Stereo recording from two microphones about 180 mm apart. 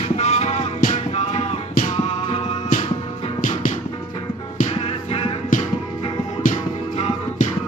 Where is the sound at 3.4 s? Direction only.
45° left (ahead or behind).